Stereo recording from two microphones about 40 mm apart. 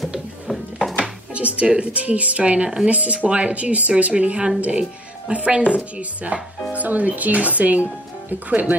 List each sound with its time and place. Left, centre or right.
0.5 s music: centre
1.3 s a woman's voice: right